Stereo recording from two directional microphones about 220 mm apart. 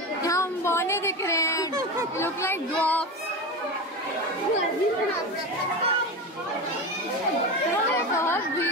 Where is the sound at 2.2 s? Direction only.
10° left (ahead or behind).